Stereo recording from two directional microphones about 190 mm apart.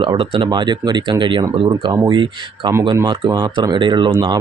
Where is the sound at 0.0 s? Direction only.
25° right (ahead or behind).